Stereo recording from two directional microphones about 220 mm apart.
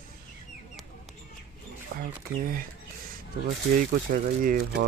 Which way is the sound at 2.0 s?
40° right (ahead or behind).